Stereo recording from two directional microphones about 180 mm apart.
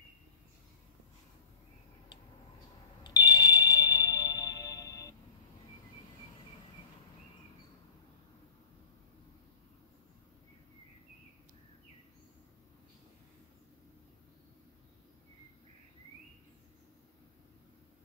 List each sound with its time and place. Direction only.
3.0 s ringtone: 20° left (ahead or behind)